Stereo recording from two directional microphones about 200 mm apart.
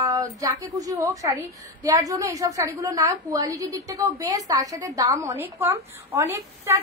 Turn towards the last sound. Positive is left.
turn(degrees=-15)  # may be behind; listen again after turning